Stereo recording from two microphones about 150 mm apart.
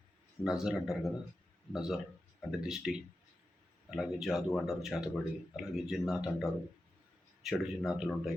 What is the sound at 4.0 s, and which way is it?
Speech, centre (ahead or behind).